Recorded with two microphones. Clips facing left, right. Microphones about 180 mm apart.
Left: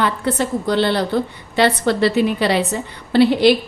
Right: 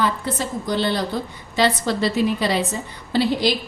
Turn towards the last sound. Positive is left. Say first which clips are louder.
# left 7 dB
turn(degrees=65)  # may be behind; listen again after turning